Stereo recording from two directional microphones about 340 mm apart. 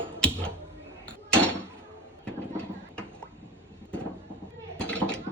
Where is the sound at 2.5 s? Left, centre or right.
Centre.